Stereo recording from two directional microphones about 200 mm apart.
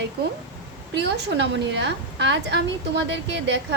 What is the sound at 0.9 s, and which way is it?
A woman's voice, 55° right (ahead or behind).